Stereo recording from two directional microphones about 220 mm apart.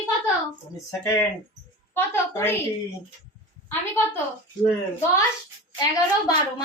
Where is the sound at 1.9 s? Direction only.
10° left (ahead or behind).